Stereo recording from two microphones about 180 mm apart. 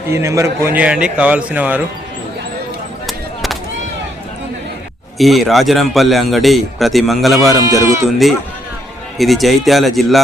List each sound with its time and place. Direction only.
0.1 s speech: 15° right (ahead or behind)
3.1 s a sound: centre (ahead or behind)
5.1 s speech: centre (ahead or behind)
7.7 s speech: 15° right (ahead or behind)
9.1 s speech: centre (ahead or behind)